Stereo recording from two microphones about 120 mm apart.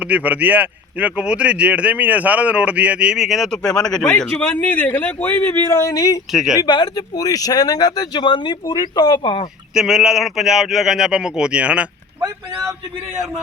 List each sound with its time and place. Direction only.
0.0 s speech: 15° right (ahead or behind); by 6.1 s 30° left (ahead or behind)
6.3 s speech: 5° right (ahead or behind)
6.7 s speech: 40° left (ahead or behind)
9.7 s speech: 5° right (ahead or behind)